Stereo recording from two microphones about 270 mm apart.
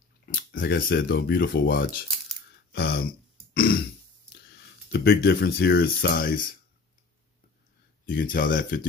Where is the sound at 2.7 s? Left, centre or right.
Left.